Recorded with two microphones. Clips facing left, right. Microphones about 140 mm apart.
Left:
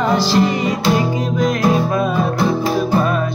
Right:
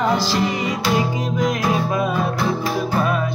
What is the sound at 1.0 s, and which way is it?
Music, 20° right (ahead or behind).